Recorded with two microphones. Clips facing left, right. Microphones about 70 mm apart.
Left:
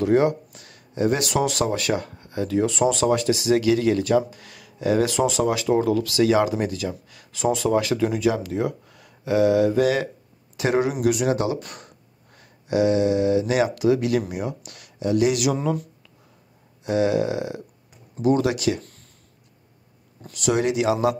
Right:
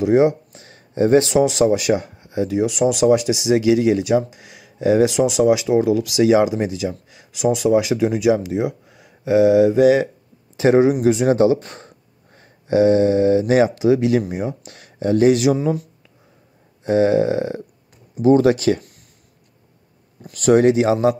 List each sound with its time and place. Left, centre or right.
0.0 s speech: centre
15.5 s speech: centre
16.8 s speech: right
20.3 s speech: right